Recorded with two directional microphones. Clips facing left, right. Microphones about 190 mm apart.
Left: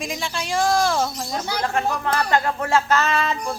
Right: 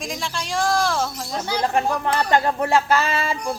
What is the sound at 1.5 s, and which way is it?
Speech, 15° right (ahead or behind).